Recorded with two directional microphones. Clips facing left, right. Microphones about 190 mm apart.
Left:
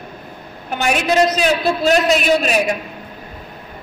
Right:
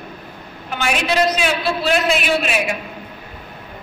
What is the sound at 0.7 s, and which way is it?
A woman's voice, 45° left (ahead or behind).